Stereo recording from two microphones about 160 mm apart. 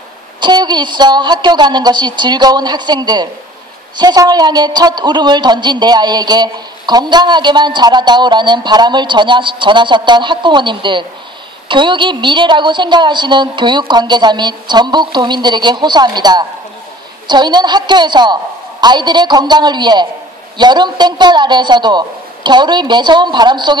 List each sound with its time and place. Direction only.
0.4 s a man's voice: 25° right (ahead or behind)